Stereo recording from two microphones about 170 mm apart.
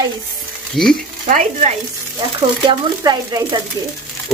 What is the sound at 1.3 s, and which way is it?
Speech, 45° right (ahead or behind).